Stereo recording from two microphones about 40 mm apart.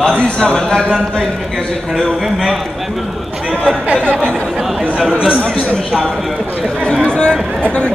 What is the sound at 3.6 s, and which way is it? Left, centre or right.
Speech, right.